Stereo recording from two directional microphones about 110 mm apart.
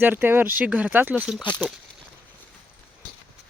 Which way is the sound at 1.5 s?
45° left (ahead or behind).